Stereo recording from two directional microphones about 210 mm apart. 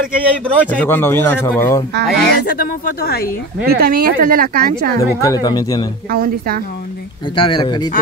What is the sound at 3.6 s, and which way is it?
Speech, 45° right (ahead or behind).